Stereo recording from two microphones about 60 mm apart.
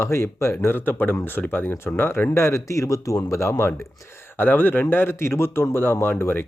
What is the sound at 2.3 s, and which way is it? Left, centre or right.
A man's voice, left.